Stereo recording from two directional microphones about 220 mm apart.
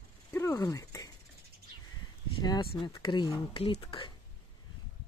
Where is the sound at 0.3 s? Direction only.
10° left (ahead or behind).